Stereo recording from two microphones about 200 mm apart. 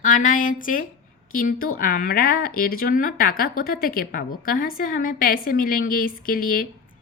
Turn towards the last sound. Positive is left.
turn(degrees=45)  # may be behind; listen again after turning